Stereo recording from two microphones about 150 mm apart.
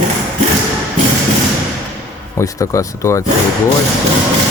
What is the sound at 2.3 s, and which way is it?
Speech, 20° left (ahead or behind).